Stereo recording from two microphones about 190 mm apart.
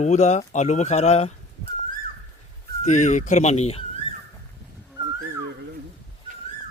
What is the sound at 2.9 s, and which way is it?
Speech, 40° left (ahead or behind).